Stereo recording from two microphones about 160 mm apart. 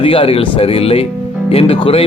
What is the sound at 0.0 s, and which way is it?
Speech, 35° left (ahead or behind).